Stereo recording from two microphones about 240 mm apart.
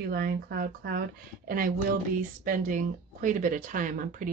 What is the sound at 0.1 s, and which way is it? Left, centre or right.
Speech, right.